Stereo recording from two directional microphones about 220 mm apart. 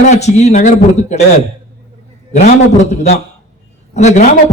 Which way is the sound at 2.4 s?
30° left (ahead or behind).